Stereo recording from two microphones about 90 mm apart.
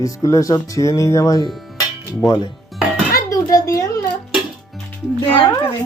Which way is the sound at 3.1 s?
40° left (ahead or behind).